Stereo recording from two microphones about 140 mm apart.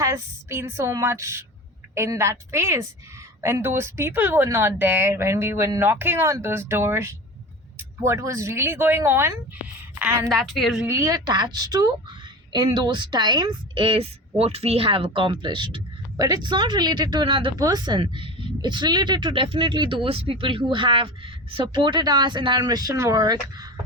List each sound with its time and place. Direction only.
0.0 s a woman's voice: 20° right (ahead or behind)
9.9 s a sound: 15° right (ahead or behind)
10.2 s a woman's voice: centre (ahead or behind)
10.8 s a woman's voice: 20° right (ahead or behind)